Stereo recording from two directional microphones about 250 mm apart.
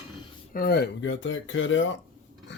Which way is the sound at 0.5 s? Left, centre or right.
Left.